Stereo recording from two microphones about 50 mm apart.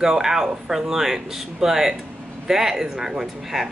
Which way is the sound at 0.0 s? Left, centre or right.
Centre.